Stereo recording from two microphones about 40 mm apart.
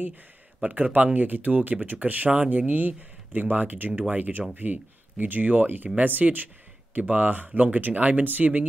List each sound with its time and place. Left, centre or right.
0.7 s speech: right